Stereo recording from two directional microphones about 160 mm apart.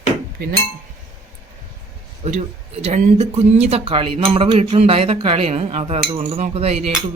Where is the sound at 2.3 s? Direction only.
45° right (ahead or behind).